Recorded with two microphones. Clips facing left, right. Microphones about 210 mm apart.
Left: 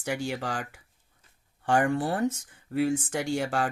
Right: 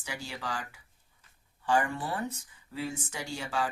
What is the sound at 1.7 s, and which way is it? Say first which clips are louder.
Speech: left 5 dB; 70° left (ahead or behind).